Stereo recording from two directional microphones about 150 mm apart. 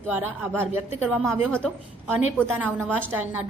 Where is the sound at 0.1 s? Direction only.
15° right (ahead or behind).